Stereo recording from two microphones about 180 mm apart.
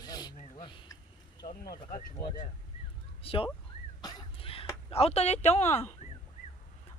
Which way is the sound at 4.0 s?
25° left (ahead or behind).